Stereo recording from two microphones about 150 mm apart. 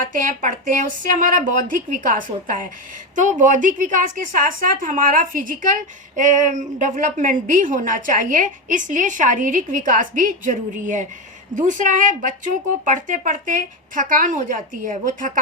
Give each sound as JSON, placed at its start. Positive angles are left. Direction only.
{"t": 0.0, "sound": "a woman's voice", "side_deg": -60}